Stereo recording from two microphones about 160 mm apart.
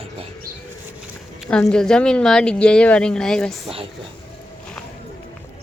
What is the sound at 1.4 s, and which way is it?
A woman's voice, 5° left (ahead or behind).